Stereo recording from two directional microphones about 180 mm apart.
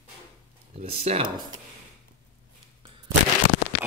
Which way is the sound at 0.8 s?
35° right (ahead or behind).